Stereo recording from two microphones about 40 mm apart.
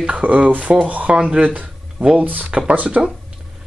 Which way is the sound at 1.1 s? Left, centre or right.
Right.